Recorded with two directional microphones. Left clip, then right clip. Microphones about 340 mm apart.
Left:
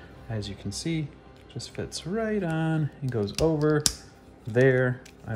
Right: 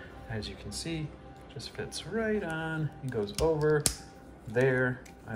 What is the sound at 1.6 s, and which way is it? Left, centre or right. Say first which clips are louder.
Speech: left 3 dB; centre.